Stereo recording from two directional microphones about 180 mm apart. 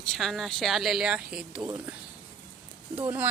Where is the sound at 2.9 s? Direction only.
10° right (ahead or behind).